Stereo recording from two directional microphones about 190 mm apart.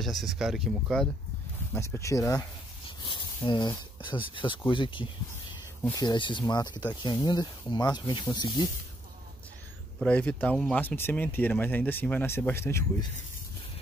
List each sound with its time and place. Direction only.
0.0 s speech: centre (ahead or behind)
1.7 s speech: 15° left (ahead or behind)
3.4 s speech: 25° left (ahead or behind)
9.9 s speech: 5° left (ahead or behind)